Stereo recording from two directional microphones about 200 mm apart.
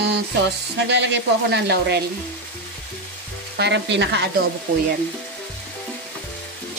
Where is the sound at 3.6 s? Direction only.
60° right (ahead or behind).